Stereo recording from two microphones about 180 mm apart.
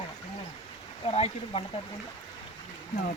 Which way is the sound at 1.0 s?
35° left (ahead or behind).